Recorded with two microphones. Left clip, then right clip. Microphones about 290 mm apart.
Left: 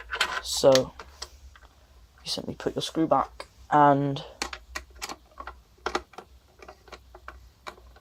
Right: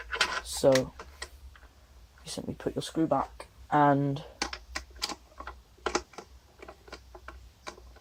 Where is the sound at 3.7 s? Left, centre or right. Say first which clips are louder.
Left 4 dB; left.